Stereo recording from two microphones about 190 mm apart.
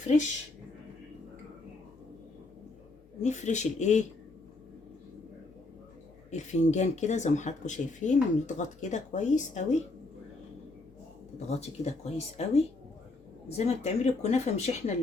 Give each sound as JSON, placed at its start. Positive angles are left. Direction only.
{"t": 3.2, "sound": "speech", "side_deg": 40}
{"t": 6.3, "sound": "speech", "side_deg": 40}
{"t": 11.3, "sound": "speech", "side_deg": 35}